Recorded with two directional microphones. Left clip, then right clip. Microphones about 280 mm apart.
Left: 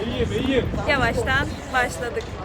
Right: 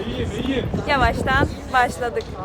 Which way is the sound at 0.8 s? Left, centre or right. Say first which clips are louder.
Right 5 dB; centre.